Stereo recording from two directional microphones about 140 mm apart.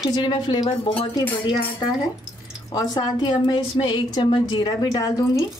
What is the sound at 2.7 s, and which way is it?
Speech, 30° left (ahead or behind).